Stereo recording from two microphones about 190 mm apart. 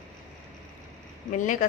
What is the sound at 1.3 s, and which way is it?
Speech, 40° left (ahead or behind).